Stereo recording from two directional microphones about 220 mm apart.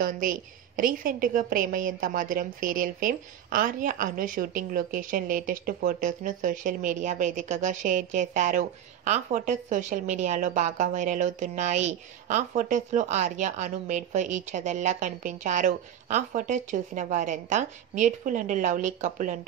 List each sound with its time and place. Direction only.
0.0 s a woman's voice: 40° right (ahead or behind)